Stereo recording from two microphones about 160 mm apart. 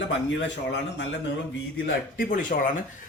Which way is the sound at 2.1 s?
60° left (ahead or behind).